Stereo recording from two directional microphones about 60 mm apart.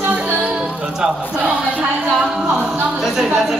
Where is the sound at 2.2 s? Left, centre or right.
Centre.